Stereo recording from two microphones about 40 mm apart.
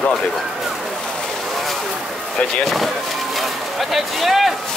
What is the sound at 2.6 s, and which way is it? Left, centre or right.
Speech, centre.